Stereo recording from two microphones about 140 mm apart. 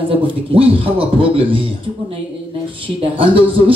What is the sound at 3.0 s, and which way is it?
Speech, 40° right (ahead or behind).